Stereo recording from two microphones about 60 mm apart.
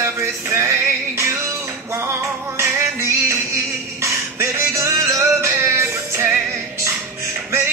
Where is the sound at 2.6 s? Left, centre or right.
Right.